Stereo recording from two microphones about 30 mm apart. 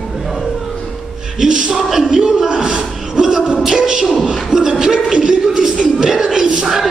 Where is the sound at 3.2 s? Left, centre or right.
Right.